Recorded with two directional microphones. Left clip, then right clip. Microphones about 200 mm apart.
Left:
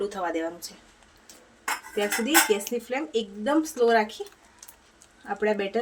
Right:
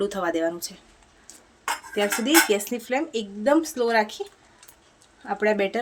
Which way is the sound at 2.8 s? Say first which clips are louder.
Right 2 dB; 40° right (ahead or behind).